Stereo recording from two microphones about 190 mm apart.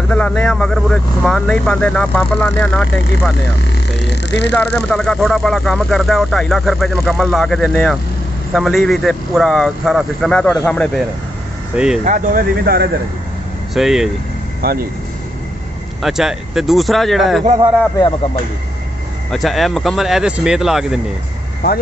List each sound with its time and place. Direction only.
0.1 s speech: 5° left (ahead or behind)
3.9 s speech: 65° left (ahead or behind)
4.6 s speech: 5° left (ahead or behind)
11.7 s speech: 5° right (ahead or behind)
12.0 s speech: 45° right (ahead or behind)
13.7 s speech: centre (ahead or behind)
14.6 s speech: 55° right (ahead or behind)
16.0 s speech: centre (ahead or behind)
19.3 s speech: centre (ahead or behind)